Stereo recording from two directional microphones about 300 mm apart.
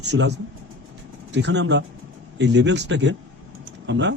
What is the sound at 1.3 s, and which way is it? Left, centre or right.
A man's voice, right.